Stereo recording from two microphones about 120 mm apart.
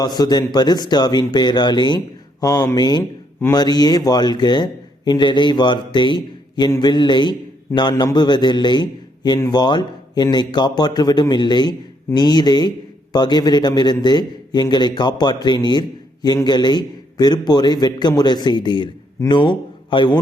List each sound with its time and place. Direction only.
0.0 s a man's voice: 35° left (ahead or behind)